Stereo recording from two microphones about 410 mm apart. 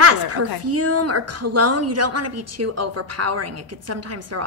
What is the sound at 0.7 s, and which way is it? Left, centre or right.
A woman's voice, right.